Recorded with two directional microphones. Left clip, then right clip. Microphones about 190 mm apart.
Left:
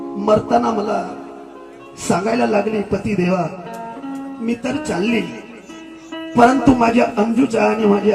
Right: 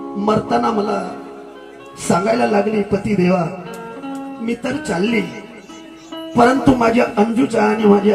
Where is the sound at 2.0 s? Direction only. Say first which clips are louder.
Right 2 dB; 20° right (ahead or behind).